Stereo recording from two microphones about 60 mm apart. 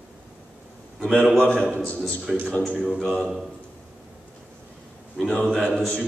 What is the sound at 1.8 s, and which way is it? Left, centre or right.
Speech, centre.